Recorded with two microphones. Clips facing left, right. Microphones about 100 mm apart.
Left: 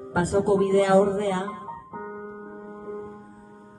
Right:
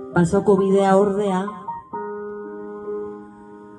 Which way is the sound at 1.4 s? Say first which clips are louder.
Right 5 dB; 35° right (ahead or behind).